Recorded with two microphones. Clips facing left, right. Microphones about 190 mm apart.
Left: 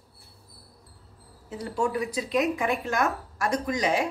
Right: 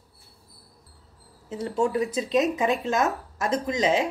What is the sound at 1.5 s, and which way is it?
Speech, 25° right (ahead or behind).